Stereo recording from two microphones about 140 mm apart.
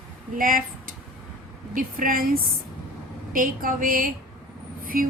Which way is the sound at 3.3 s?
80° right.